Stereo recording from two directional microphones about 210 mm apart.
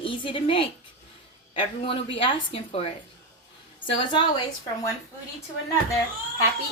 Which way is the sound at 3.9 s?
25° left (ahead or behind).